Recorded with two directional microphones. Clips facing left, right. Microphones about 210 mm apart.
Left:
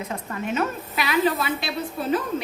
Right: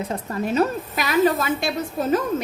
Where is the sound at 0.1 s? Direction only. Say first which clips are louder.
Right 3 dB; 35° right (ahead or behind).